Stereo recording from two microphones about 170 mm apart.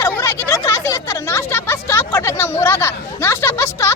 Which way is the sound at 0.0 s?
15° left (ahead or behind).